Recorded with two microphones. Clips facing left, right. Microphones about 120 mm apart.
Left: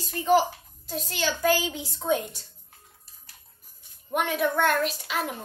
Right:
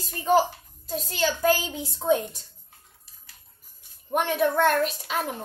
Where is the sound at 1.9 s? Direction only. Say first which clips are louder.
Right 3 dB; 30° right (ahead or behind).